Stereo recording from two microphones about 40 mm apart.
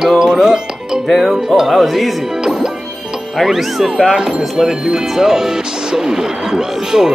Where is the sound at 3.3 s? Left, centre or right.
Centre.